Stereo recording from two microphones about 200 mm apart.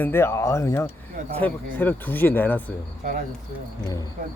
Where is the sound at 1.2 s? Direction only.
40° right (ahead or behind).